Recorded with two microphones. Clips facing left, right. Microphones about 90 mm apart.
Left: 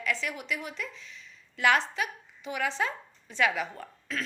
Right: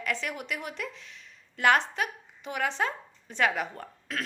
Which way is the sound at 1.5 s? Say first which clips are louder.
Right 1 dB; 45° right (ahead or behind).